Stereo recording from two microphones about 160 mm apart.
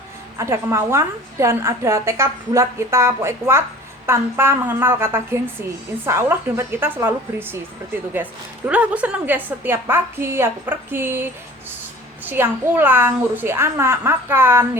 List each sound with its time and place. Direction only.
0.3 s a woman's voice: 20° right (ahead or behind)